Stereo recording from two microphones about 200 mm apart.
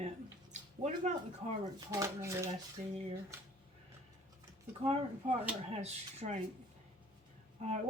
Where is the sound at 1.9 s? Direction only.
15° right (ahead or behind).